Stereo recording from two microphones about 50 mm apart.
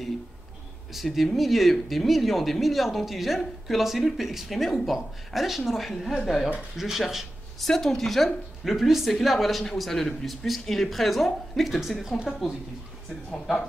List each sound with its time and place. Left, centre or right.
0.9 s speech: centre
7.6 s speech: centre
13.3 s speech: centre